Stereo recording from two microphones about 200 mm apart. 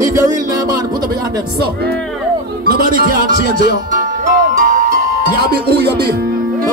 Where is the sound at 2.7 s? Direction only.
50° right (ahead or behind).